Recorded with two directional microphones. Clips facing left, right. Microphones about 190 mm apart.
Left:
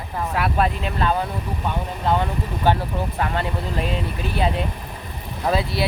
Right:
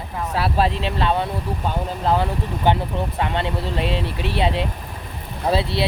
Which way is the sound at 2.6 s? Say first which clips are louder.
Right 1 dB; 20° right (ahead or behind).